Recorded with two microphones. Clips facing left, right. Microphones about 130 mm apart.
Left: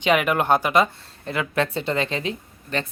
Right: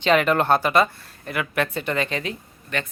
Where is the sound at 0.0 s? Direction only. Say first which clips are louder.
Right 1 dB; 10° left (ahead or behind).